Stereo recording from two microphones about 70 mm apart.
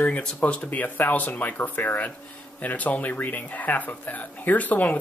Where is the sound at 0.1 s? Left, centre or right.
Centre.